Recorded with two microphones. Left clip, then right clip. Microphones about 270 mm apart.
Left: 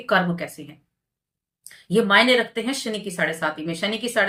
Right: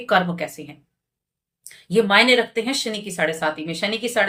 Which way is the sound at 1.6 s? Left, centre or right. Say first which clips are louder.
Right 1 dB; centre.